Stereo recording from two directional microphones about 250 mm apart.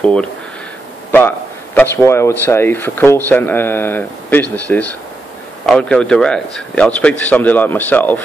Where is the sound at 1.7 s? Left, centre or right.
Centre.